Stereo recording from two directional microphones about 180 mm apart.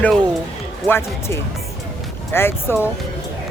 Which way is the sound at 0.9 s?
15° left (ahead or behind).